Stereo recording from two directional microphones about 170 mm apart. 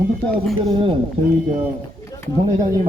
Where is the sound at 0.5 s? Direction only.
30° right (ahead or behind).